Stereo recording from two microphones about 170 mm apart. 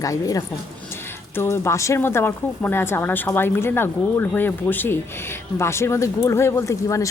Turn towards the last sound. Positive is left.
turn(degrees=20)  # may be behind; listen again after turning